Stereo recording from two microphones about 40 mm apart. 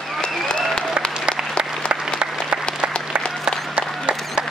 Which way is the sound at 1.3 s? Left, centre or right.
Right.